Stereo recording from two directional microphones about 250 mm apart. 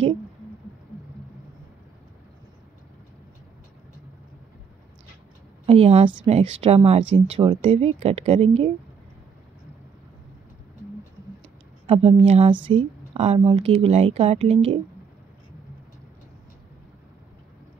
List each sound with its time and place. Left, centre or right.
5.7 s speech: right
11.8 s a woman's voice: right